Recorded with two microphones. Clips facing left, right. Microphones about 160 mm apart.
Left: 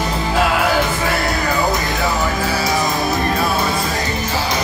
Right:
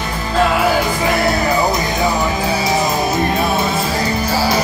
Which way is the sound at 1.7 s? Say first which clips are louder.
Right 2 dB; 20° right (ahead or behind).